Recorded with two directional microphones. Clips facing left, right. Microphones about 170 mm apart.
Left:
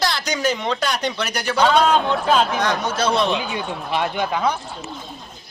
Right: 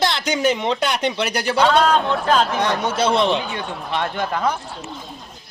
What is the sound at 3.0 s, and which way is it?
Speech, 25° right (ahead or behind).